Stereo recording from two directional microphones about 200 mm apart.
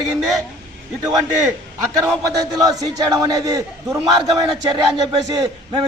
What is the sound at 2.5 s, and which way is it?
A man's voice, 20° right (ahead or behind).